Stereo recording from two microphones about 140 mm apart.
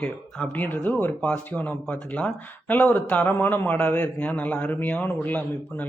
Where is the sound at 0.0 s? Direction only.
5° left (ahead or behind).